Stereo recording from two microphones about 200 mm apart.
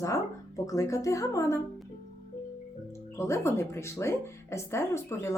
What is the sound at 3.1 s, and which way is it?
Speech, 15° left (ahead or behind).